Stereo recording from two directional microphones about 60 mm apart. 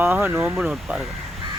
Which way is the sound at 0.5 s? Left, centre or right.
Centre.